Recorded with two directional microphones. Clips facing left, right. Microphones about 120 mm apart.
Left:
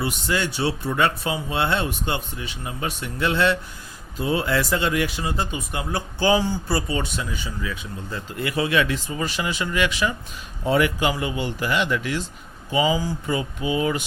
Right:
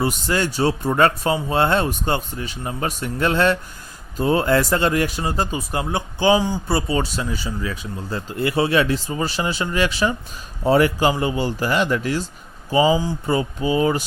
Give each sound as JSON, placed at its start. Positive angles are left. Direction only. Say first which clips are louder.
{"t": 0.0, "sound": "speech", "louder": "right 4 dB", "side_deg": -40}
{"t": 5.9, "sound": "speech", "louder": "right 3 dB", "side_deg": -20}